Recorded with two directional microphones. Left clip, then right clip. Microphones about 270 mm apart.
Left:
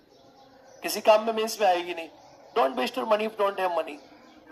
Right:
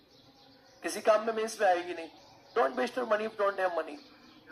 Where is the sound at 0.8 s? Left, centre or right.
Left.